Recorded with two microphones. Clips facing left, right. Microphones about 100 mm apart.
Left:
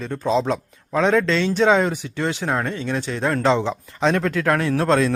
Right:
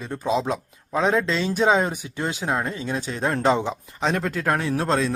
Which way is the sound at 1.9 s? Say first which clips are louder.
Left 4 dB; 15° right (ahead or behind).